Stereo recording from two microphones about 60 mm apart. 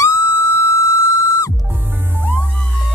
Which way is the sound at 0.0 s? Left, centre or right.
Left.